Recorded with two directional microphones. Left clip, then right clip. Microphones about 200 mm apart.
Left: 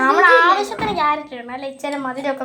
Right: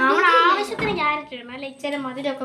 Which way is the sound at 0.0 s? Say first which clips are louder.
Left 4 dB; 25° left (ahead or behind).